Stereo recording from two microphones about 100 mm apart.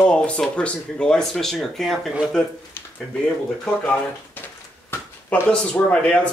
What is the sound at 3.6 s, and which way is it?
Speech, 15° left (ahead or behind).